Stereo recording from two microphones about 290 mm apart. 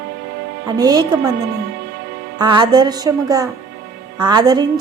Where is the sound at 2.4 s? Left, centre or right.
Centre.